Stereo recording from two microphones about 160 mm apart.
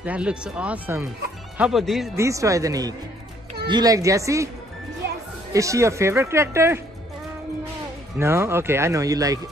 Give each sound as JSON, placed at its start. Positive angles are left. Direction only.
{"t": 0.0, "sound": "speech", "side_deg": -10}
{"t": 2.1, "sound": "speech", "side_deg": -20}
{"t": 5.5, "sound": "speech", "side_deg": -20}
{"t": 8.2, "sound": "speech", "side_deg": -15}